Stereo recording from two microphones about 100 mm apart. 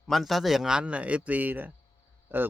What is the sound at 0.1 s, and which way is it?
A man's voice, centre (ahead or behind).